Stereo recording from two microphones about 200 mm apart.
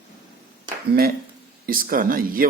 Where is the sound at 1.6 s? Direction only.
45° right (ahead or behind).